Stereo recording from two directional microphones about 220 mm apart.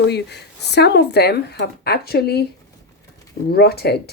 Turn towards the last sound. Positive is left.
turn(degrees=45)  # may be behind; listen again after turning